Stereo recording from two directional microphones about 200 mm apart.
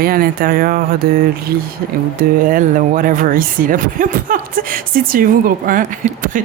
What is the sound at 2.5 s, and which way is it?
Speech, 45° right (ahead or behind).